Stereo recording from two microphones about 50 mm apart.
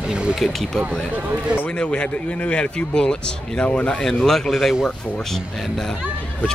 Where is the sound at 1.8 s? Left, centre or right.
Left.